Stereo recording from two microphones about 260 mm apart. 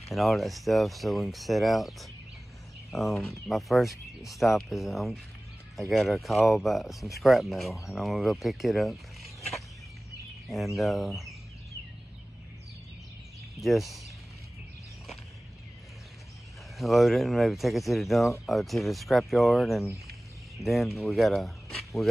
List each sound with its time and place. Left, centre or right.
0.1 s speech: centre
10.8 s speech: centre
13.6 s speech: centre
16.7 s speech: centre